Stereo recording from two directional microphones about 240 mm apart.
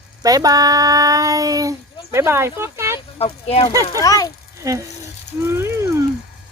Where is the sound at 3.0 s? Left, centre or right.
Left.